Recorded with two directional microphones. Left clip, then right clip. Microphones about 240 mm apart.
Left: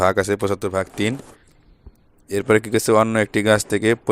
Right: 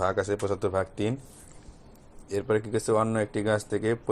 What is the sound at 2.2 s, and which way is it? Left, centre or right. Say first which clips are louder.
Speech: left 9 dB; left.